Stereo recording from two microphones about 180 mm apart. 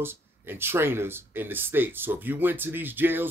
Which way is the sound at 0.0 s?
15° right (ahead or behind).